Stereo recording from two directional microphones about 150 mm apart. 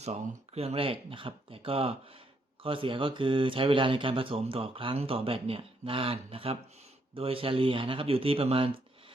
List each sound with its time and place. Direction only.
0.0 s speech: 45° right (ahead or behind)